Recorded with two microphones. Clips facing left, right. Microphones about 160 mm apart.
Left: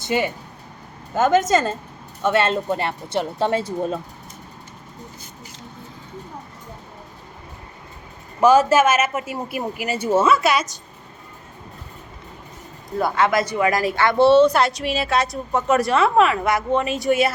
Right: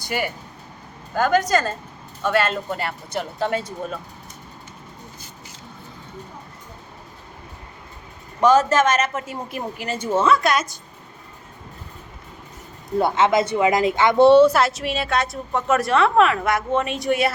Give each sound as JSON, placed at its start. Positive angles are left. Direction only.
{"t": 0.0, "sound": "speech", "side_deg": 25}
{"t": 8.4, "sound": "a woman's voice", "side_deg": 10}
{"t": 13.0, "sound": "speech", "side_deg": -25}